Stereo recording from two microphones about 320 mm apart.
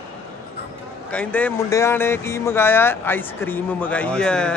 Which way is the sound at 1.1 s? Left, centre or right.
Centre.